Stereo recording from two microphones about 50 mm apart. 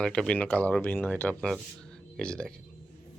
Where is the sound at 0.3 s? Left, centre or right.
Left.